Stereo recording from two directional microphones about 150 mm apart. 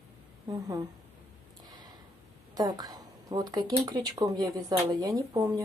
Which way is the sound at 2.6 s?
25° right (ahead or behind).